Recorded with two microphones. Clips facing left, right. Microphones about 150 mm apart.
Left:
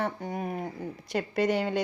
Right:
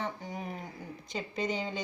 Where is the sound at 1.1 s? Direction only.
65° left (ahead or behind).